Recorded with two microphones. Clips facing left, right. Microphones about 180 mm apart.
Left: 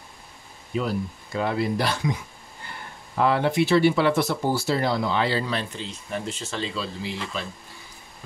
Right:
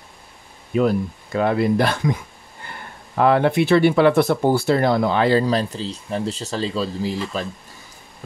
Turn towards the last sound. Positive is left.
turn(degrees=-40)  # may be behind; listen again after turning